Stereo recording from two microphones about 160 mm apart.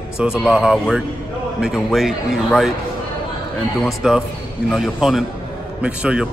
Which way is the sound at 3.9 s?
5° right (ahead or behind).